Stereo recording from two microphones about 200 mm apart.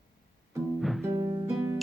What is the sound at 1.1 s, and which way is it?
Music, 15° right (ahead or behind).